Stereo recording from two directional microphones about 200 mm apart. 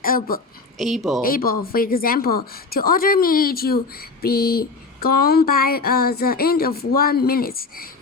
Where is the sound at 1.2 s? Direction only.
45° left (ahead or behind).